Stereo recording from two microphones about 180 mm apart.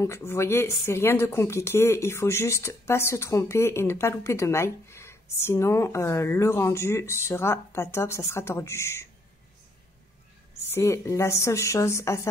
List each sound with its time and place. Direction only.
0.0 s speech: 15° left (ahead or behind)
10.5 s speech: 15° left (ahead or behind)